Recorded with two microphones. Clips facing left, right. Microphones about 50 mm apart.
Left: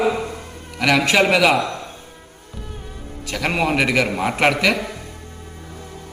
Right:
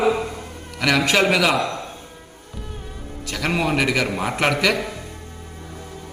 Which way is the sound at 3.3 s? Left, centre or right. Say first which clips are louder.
Left 2 dB; centre.